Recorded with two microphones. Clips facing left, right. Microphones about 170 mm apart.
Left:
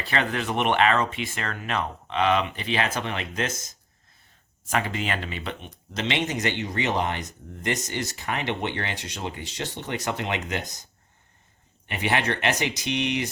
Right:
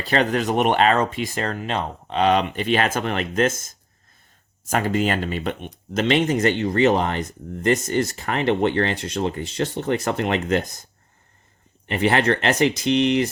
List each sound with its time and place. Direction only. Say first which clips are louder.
0.0 s speech: right 6 dB; 40° right (ahead or behind)
11.9 s speech: right 7 dB; 50° right (ahead or behind)